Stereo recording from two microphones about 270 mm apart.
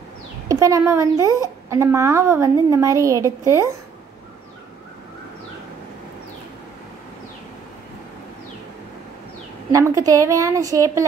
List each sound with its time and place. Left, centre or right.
0.5 s speech: centre
9.7 s speech: centre